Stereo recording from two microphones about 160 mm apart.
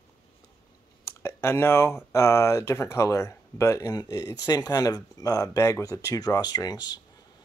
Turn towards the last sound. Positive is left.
turn(degrees=25)  # may be behind; listen again after turning